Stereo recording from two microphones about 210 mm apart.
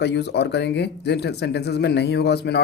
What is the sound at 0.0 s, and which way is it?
Speech, 55° left (ahead or behind).